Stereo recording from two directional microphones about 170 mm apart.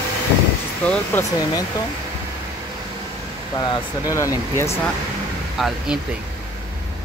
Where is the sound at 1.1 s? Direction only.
10° left (ahead or behind).